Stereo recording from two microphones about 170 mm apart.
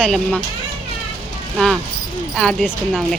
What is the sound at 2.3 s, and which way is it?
Speech, 5° left (ahead or behind).